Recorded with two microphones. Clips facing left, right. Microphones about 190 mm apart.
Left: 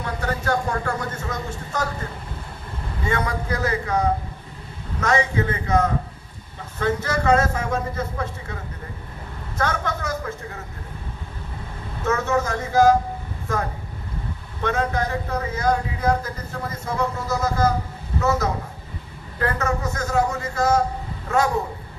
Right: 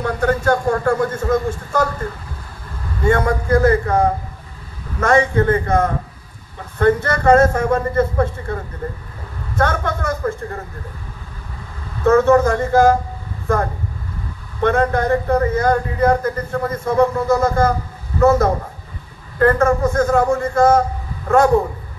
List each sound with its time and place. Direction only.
0.0 s speech: 50° right (ahead or behind)
3.0 s a man's voice: 50° right (ahead or behind)
9.6 s speech: 55° right (ahead or behind)
12.0 s a man's voice: 55° right (ahead or behind)